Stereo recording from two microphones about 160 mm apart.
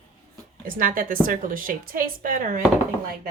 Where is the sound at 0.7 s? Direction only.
60° right (ahead or behind).